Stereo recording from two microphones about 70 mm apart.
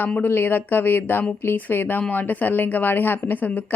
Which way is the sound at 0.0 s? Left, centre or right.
Left.